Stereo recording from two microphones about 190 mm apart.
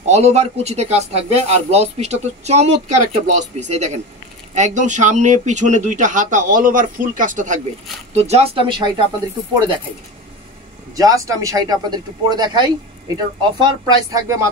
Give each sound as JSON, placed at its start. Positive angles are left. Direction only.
{"t": 0.0, "sound": "speech", "side_deg": -35}
{"t": 11.0, "sound": "speech", "side_deg": -20}